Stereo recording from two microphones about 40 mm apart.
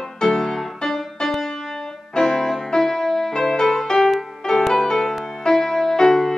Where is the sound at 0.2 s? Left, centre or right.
Centre.